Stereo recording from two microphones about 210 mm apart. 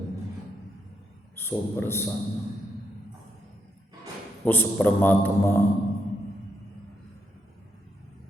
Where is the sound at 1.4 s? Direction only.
10° left (ahead or behind).